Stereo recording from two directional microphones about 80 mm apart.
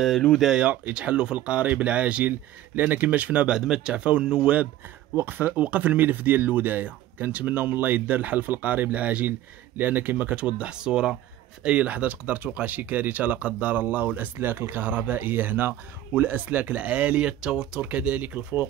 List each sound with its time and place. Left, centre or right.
0.4 s speech: centre
5.1 s speech: right